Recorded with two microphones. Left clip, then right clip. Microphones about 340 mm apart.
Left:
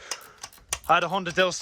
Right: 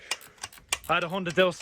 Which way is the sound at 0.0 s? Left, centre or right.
Centre.